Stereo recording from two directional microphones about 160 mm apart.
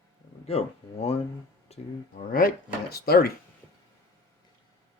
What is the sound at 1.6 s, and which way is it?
Speech, 40° left (ahead or behind).